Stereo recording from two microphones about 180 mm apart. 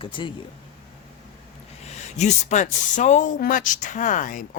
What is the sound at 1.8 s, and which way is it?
Speech, 40° left (ahead or behind).